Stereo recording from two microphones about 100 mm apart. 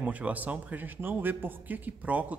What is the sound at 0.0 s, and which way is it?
Speech, 15° right (ahead or behind).